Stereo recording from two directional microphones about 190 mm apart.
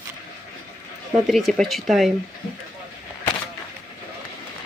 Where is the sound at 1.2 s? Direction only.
Centre (ahead or behind).